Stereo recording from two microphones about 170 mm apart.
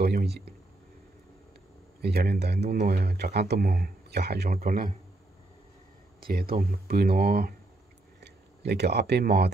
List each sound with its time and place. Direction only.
0.0 s a sound: 70° right (ahead or behind)
2.0 s speech: 70° right (ahead or behind)
6.2 s speech: 60° right (ahead or behind)
8.2 s speech: 75° right (ahead or behind)